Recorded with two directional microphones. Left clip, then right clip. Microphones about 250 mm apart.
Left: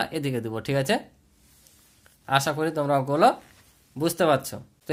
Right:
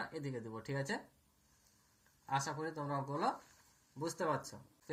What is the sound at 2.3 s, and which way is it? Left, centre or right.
Speech, left.